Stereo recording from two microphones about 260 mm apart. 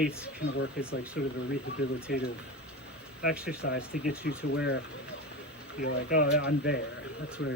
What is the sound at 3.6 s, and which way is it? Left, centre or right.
Speech, left.